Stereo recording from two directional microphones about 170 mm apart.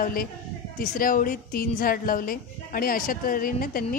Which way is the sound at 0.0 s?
55° left (ahead or behind).